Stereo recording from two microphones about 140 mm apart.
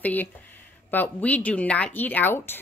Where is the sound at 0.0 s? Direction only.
10° left (ahead or behind).